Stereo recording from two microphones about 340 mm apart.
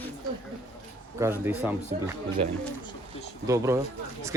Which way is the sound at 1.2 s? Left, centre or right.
Centre.